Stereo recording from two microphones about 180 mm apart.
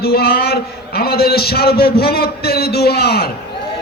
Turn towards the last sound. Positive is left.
turn(degrees=60)  # may be behind; listen again after turning